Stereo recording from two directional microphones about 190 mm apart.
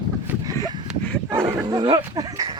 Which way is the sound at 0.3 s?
10° right (ahead or behind).